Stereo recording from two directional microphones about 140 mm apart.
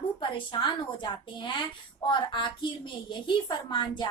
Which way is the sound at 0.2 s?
35° left (ahead or behind).